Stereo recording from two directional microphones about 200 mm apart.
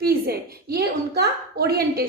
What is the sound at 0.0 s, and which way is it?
A woman's voice, 50° right (ahead or behind).